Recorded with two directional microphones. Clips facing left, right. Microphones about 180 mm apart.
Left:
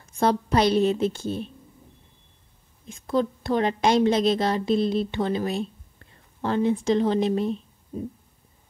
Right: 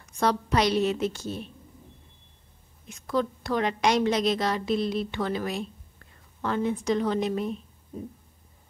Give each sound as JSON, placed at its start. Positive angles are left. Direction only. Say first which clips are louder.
{"t": 0.1, "sound": "a woman's voice", "louder": "left 3 dB", "side_deg": 30}
{"t": 2.9, "sound": "a woman's voice", "louder": "left 3 dB", "side_deg": 25}